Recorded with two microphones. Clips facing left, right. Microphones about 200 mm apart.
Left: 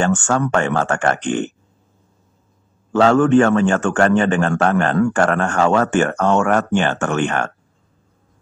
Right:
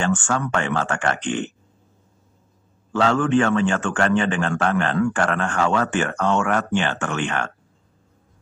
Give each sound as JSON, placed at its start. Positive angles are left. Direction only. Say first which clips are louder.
{"t": 0.0, "sound": "a man's voice", "louder": "left 5 dB", "side_deg": 45}
{"t": 2.9, "sound": "a man's voice", "louder": "left 6 dB", "side_deg": 45}